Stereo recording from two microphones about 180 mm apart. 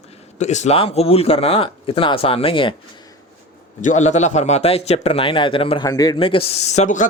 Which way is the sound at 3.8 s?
40° left (ahead or behind).